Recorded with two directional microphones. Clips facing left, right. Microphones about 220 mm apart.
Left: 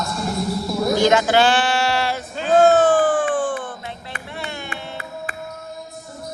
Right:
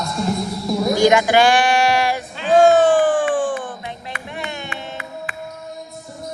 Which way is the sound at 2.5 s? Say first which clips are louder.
Right 2 dB; 15° right (ahead or behind).